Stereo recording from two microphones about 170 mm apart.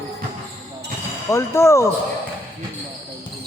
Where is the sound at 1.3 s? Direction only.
15° left (ahead or behind).